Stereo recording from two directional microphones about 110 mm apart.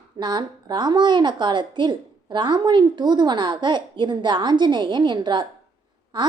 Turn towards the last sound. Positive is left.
turn(degrees=-45)  # may be behind; listen again after turning